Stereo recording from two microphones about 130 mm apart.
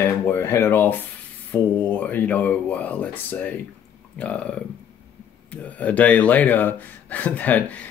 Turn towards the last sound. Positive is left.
turn(degrees=10)  # may be behind; listen again after turning